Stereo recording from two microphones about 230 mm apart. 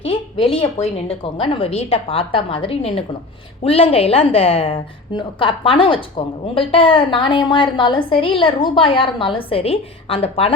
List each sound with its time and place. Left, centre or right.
0.0 s a woman's voice: left